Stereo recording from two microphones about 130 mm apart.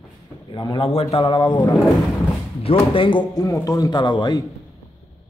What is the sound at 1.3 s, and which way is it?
Speech, 35° left (ahead or behind).